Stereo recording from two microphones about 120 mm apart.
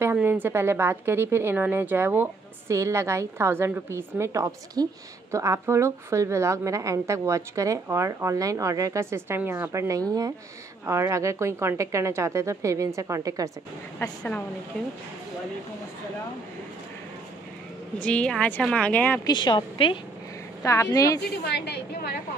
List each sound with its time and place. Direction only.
0.0 s a woman's voice: 15° right (ahead or behind)
13.9 s a woman's voice: 10° left (ahead or behind)
17.9 s a woman's voice: 10° left (ahead or behind)
19.2 s a woman's voice: 40° left (ahead or behind)
20.6 s a woman's voice: 25° left (ahead or behind)